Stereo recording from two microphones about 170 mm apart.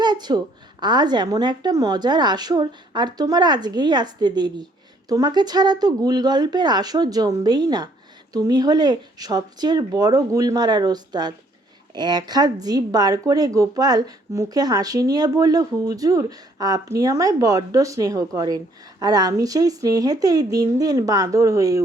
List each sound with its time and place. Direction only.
0.0 s speech: 25° right (ahead or behind)